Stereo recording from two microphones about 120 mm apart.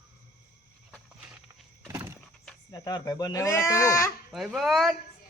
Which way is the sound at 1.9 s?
20° right (ahead or behind).